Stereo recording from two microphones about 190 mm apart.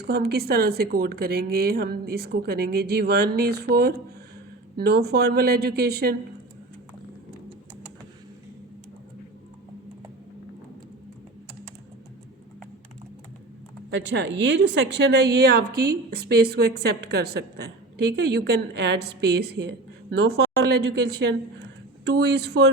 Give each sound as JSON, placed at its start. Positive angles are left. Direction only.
{"t": 0.0, "sound": "a woman's voice", "side_deg": -55}
{"t": 13.9, "sound": "a woman's voice", "side_deg": -70}